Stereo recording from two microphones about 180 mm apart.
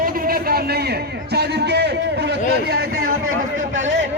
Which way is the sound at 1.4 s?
65° right (ahead or behind).